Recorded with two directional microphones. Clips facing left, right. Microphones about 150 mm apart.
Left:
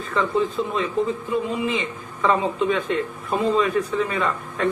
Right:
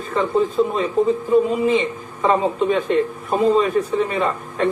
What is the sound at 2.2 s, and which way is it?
A man's voice, 35° right (ahead or behind).